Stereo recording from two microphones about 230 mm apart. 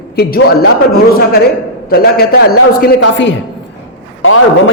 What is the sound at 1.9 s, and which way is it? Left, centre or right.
A man's voice, left.